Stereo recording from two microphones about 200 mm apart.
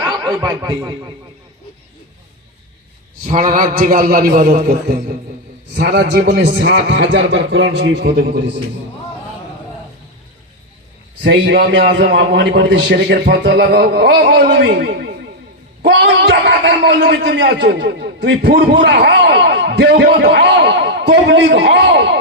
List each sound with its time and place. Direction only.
0.3 s a man's voice: 20° right (ahead or behind)
3.2 s a man's voice: 40° right (ahead or behind); by 8.1 s 60° right (ahead or behind)
8.3 s a man's voice: 45° right (ahead or behind)
11.2 s a man's voice: 60° right (ahead or behind)